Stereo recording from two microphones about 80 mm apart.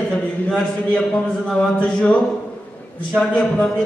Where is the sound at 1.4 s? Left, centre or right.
Centre.